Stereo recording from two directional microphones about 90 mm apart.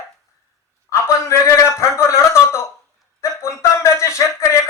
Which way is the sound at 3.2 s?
35° left (ahead or behind).